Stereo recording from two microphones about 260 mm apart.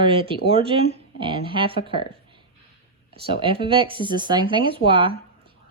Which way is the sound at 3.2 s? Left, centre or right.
Centre.